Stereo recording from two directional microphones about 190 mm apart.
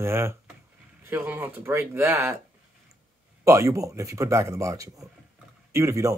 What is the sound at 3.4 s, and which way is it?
Speech, 15° right (ahead or behind).